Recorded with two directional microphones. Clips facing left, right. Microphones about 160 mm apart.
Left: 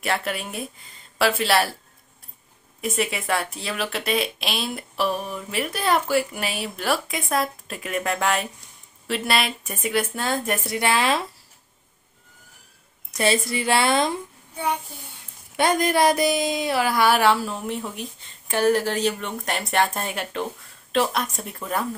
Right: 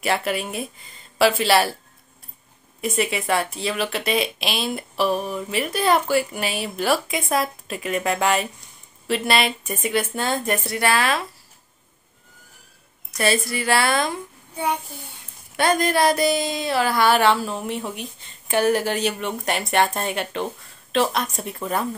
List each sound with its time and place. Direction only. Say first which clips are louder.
0.0 s speech: right 3 dB; 5° right (ahead or behind)
2.8 s speech: right 2 dB; centre (ahead or behind)
10.7 s a woman's voice: left 1 dB; 20° left (ahead or behind)
13.2 s a woman's voice: even; 20° left (ahead or behind)
15.5 s speech: even; 15° left (ahead or behind); by 21.8 s centre (ahead or behind)